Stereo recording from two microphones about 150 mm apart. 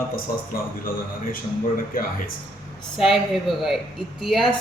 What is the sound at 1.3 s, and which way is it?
Speech, 70° left (ahead or behind).